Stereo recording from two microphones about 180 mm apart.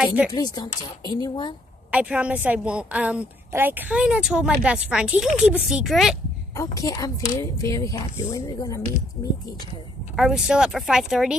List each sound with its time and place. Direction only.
0.0 s a woman's voice: 10° right (ahead or behind)
0.3 s speech: 25° left (ahead or behind)
1.9 s a woman's voice: 5° right (ahead or behind)
6.5 s a woman's voice: 15° left (ahead or behind)
10.1 s speech: centre (ahead or behind)